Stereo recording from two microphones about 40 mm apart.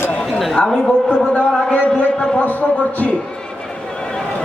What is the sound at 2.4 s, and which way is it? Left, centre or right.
Speech, left.